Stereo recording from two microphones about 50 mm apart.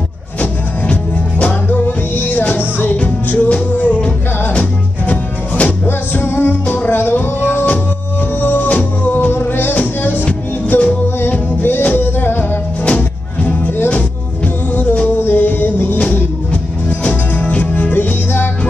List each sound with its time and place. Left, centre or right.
2.1 s music: left
3.3 s music: left
5.9 s music: left
12.8 s music: left
14.7 s music: left
17.0 s music: left